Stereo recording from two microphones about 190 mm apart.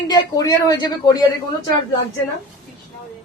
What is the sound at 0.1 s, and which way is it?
Speech, 20° left (ahead or behind).